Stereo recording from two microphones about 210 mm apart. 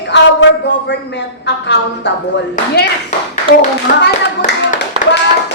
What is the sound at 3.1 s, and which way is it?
Speech, 35° left (ahead or behind).